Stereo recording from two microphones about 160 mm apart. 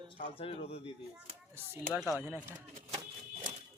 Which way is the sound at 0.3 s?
35° left (ahead or behind).